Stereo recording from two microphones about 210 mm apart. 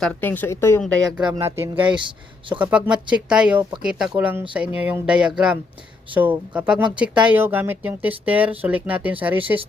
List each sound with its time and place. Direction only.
0.0 s speech: 10° left (ahead or behind)
1.2 s speech: 15° right (ahead or behind)
1.9 s speech: 25° right (ahead or behind)
2.6 s speech: 10° right (ahead or behind)